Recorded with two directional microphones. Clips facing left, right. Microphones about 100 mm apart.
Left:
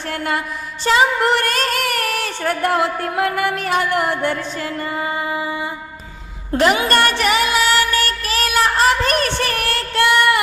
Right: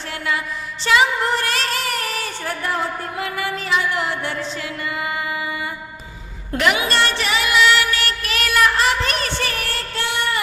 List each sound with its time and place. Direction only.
0.1 s music: 50° left (ahead or behind)
0.9 s music: 35° left (ahead or behind)
1.2 s music: 60° left (ahead or behind); by 6.8 s 35° left (ahead or behind)
6.8 s music: 50° left (ahead or behind)